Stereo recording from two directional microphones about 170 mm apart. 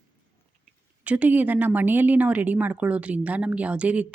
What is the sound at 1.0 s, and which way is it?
A woman's voice, 10° right (ahead or behind).